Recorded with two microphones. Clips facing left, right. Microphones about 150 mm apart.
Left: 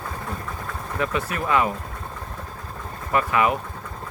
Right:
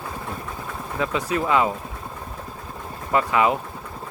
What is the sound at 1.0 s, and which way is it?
Speech, 15° right (ahead or behind).